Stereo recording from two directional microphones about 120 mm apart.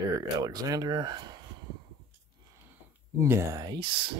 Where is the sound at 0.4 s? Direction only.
35° right (ahead or behind).